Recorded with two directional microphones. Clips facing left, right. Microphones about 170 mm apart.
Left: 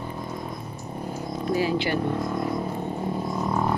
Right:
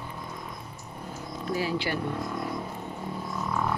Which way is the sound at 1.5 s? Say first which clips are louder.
Left 5 dB; 20° left (ahead or behind).